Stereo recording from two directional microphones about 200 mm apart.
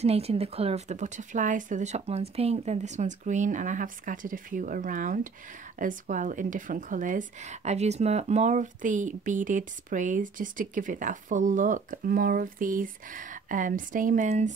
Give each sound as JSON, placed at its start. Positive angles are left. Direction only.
{"t": 0.0, "sound": "a woman's voice", "side_deg": -30}